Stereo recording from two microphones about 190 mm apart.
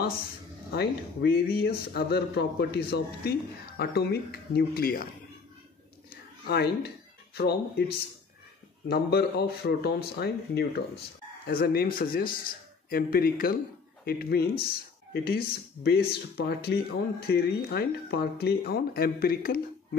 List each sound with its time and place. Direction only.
0.7 s speech: 55° left (ahead or behind)
6.4 s speech: 60° left (ahead or behind)
8.8 s speech: 55° left (ahead or behind)